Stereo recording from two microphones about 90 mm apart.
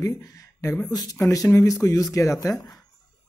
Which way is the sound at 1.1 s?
30° left (ahead or behind).